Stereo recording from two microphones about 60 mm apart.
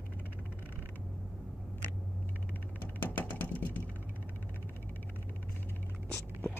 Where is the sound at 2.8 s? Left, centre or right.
Left.